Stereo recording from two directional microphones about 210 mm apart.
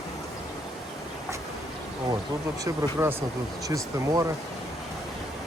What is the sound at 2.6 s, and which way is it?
Speech, 15° right (ahead or behind).